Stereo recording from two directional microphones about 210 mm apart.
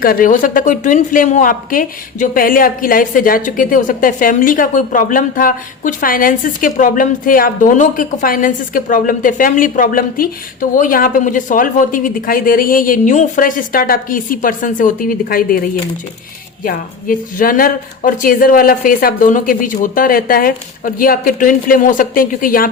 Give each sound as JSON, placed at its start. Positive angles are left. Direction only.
{"t": 0.0, "sound": "a woman's voice", "side_deg": 40}
{"t": 16.6, "sound": "a woman's voice", "side_deg": 40}